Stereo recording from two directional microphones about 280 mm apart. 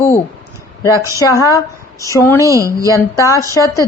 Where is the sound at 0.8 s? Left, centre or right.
Centre.